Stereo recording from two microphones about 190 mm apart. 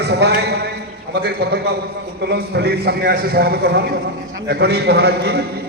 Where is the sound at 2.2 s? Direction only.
60° right (ahead or behind).